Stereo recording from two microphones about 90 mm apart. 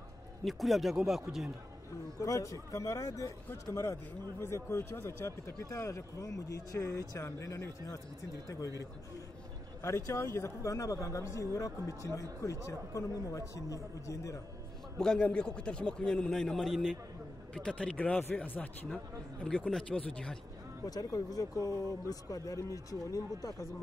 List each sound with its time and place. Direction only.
0.5 s speech: centre (ahead or behind)
2.1 s a man's voice: 40° left (ahead or behind)
9.8 s a man's voice: 30° left (ahead or behind)
15.0 s a man's voice: 10° left (ahead or behind)
19.7 s a man's voice: 10° left (ahead or behind)
20.8 s a man's voice: 45° left (ahead or behind)